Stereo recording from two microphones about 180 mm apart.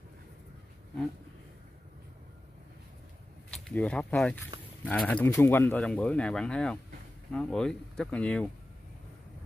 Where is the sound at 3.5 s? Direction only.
5° left (ahead or behind).